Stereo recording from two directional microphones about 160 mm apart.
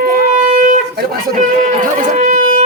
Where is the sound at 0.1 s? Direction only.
55° right (ahead or behind).